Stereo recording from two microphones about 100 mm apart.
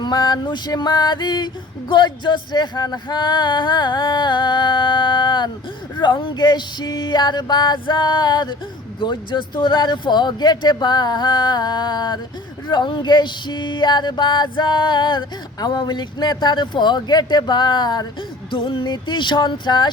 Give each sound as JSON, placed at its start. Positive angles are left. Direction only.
{"t": 0.0, "sound": "music", "side_deg": 45}
{"t": 18.5, "sound": "music", "side_deg": 60}